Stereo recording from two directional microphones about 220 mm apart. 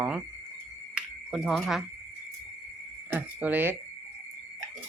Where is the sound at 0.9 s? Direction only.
Centre (ahead or behind).